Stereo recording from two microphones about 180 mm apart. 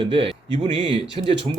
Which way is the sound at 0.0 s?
30° right (ahead or behind).